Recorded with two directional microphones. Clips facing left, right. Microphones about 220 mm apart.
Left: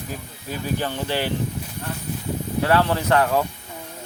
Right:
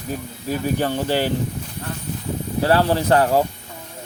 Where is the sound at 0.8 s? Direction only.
45° right (ahead or behind).